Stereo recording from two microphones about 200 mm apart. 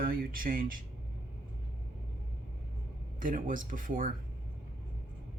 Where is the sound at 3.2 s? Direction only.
40° right (ahead or behind).